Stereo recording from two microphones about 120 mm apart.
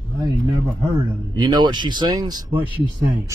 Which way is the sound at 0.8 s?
30° right (ahead or behind).